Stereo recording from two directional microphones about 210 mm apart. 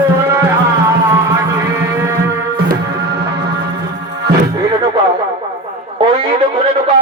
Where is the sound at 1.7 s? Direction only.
15° right (ahead or behind).